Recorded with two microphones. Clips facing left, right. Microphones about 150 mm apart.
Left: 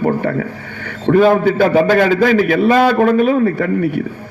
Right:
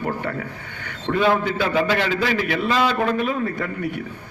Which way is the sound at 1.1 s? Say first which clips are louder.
Left 9 dB; 50° left (ahead or behind).